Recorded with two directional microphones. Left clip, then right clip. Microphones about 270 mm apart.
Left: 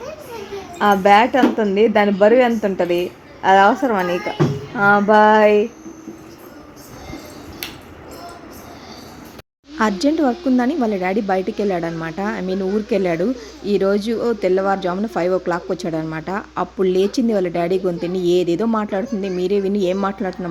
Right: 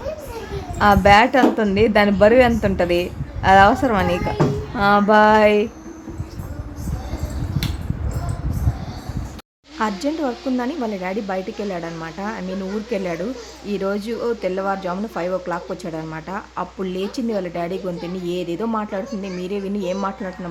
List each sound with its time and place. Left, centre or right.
0.8 s a woman's voice: centre
9.7 s speech: centre